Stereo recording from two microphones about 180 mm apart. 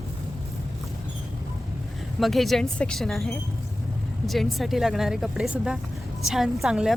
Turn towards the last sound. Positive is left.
turn(degrees=-5)  # may be behind; listen again after turning